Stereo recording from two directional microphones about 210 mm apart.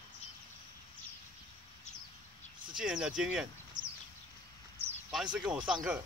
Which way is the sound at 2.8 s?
5° right (ahead or behind).